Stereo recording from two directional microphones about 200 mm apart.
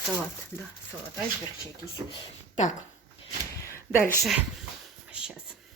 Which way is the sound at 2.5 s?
35° left (ahead or behind).